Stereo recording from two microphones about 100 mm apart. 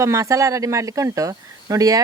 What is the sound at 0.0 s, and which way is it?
Speech, 30° right (ahead or behind).